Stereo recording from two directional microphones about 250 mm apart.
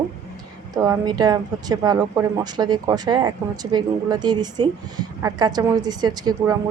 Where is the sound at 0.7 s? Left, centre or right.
Centre.